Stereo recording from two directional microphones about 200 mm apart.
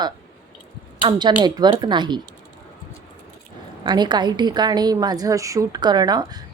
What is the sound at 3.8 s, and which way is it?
Speech, 20° right (ahead or behind).